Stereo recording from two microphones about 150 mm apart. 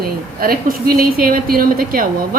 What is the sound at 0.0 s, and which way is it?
A woman's voice, 80° right.